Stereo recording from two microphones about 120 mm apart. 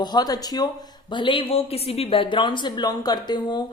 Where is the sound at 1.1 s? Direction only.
45° left (ahead or behind).